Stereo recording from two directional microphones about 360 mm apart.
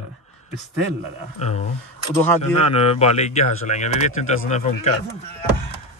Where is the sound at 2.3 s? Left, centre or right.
Centre.